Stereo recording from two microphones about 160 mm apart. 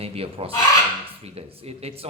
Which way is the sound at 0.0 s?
40° right (ahead or behind).